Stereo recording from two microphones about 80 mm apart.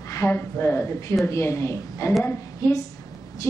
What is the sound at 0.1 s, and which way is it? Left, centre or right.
A woman's voice, left.